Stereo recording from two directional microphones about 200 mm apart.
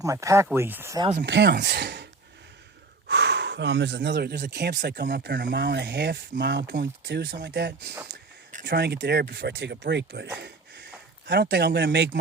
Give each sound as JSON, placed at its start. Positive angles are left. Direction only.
{"t": 0.0, "sound": "speech", "side_deg": -15}
{"t": 1.2, "sound": "speech", "side_deg": -55}
{"t": 3.1, "sound": "speech", "side_deg": -60}
{"t": 10.3, "sound": "a sound", "side_deg": -60}
{"t": 11.3, "sound": "speech", "side_deg": -55}